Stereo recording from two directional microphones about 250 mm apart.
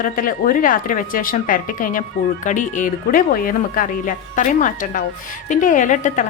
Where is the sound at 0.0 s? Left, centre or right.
Left.